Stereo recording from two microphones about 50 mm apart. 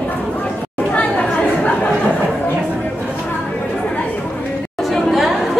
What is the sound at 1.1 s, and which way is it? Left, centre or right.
Chatter, left.